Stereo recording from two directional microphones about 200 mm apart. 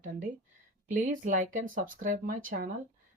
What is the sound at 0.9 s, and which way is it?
Speech, 40° right (ahead or behind).